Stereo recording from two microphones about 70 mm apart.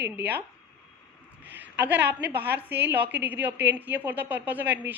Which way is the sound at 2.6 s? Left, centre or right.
Right.